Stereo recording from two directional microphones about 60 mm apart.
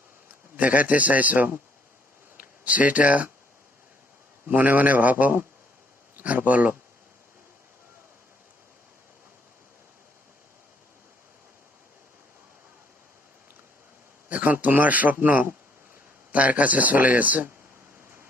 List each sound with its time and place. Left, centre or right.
0.5 s speech: right
4.4 s speech: right
14.3 s a sound: right
15.1 s speech: right